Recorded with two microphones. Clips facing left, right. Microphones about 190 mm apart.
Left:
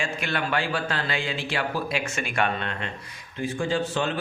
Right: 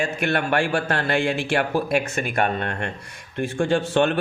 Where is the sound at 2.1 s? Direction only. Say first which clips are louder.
Right 3 dB; 45° right (ahead or behind); by 4.1 s 65° right (ahead or behind).